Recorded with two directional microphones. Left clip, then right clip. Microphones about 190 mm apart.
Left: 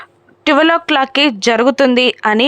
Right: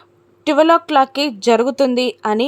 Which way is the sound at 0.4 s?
10° left (ahead or behind).